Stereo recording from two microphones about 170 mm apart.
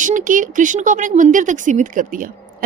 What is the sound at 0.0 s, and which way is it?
Speech, 50° right (ahead or behind).